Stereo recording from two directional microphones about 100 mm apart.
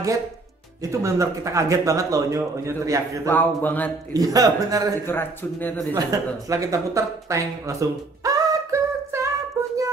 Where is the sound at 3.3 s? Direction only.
20° left (ahead or behind).